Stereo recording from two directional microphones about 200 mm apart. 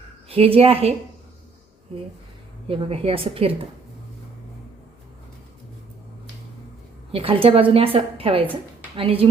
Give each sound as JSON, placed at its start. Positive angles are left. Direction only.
{"t": 0.3, "sound": "a woman's voice", "side_deg": -30}
{"t": 2.6, "sound": "a woman's voice", "side_deg": -30}
{"t": 7.1, "sound": "a woman's voice", "side_deg": -30}